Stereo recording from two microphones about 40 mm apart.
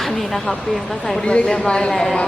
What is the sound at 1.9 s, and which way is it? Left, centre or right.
Speech, centre.